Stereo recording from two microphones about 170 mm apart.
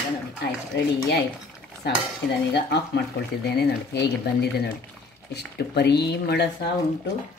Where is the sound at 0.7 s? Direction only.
90° left.